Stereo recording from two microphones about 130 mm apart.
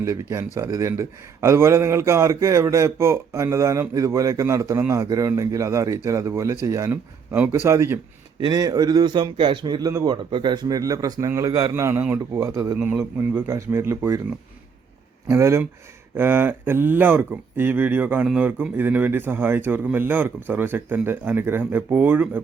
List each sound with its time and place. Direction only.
0.0 s a man's voice: 25° right (ahead or behind)
8.4 s a man's voice: 35° right (ahead or behind)
12.8 s a man's voice: 15° right (ahead or behind)
15.3 s a man's voice: 25° right (ahead or behind)